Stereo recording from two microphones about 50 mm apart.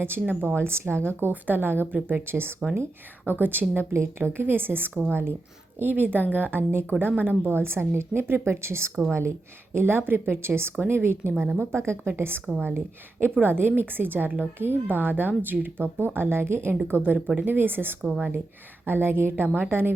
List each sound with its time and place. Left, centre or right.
0.0 s speech: right
1.3 s speech: right
3.9 s a woman's voice: right
4.4 s speech: right
6.6 s a woman's voice: right
9.7 s a woman's voice: right
12.0 s speech: right